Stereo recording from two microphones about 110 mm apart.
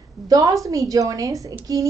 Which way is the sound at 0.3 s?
35° right (ahead or behind).